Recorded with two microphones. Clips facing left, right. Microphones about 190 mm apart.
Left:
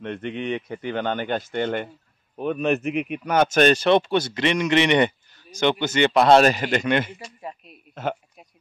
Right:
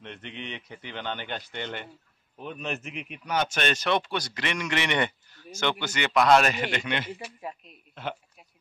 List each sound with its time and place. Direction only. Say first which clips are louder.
0.0 s speech: left 11 dB; 55° left (ahead or behind)
2.3 s speech: left 12 dB; 60° left (ahead or behind)
7.2 s speech: left 1 dB; 5° right (ahead or behind)
7.9 s speech: left 7 dB; 45° left (ahead or behind)